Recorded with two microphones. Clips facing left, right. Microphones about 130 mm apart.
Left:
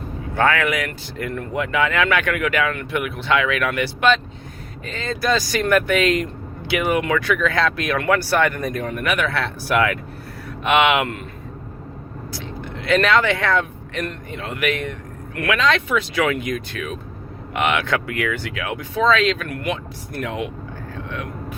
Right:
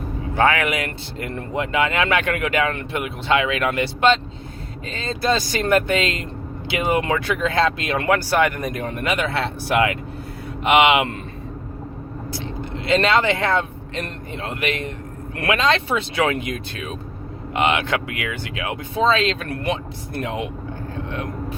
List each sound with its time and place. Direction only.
0.3 s speech: 20° right (ahead or behind)
12.3 s speech: 20° right (ahead or behind)
20.9 s vehicle: 25° right (ahead or behind)